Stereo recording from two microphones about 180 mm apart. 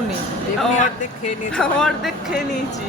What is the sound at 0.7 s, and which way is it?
Speech, 45° left (ahead or behind).